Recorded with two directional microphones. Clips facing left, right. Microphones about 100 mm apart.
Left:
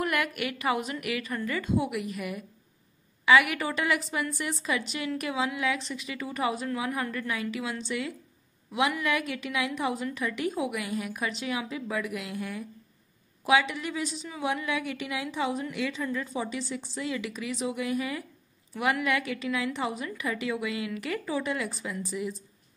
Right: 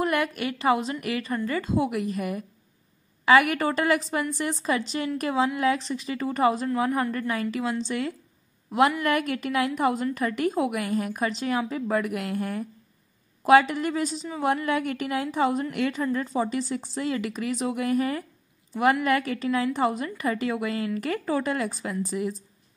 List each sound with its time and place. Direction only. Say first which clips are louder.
0.0 s a woman's voice: right 4 dB; 30° right (ahead or behind)